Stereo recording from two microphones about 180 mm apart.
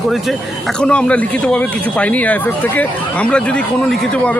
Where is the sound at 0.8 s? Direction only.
5° left (ahead or behind).